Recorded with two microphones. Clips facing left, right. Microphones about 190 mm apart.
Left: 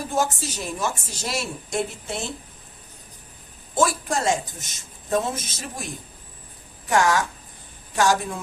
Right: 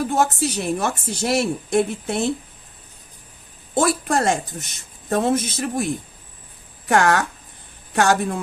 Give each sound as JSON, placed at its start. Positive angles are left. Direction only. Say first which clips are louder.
{"t": 0.0, "sound": "a woman's voice", "louder": "right 5 dB", "side_deg": -60}
{"t": 3.8, "sound": "a woman's voice", "louder": "right 3 dB", "side_deg": -60}